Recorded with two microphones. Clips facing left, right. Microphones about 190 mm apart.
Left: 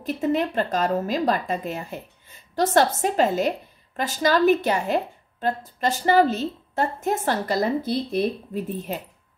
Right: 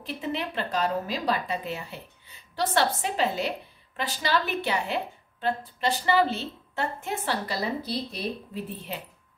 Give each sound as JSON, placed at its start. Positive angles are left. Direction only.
{"t": 0.0, "sound": "speech", "side_deg": 45}